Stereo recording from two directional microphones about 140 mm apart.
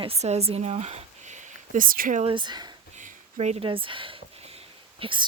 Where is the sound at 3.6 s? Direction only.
35° right (ahead or behind).